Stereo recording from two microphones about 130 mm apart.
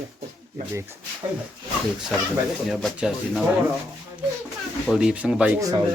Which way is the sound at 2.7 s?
5° right (ahead or behind).